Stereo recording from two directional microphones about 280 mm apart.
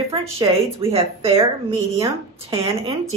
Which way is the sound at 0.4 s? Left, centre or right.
Centre.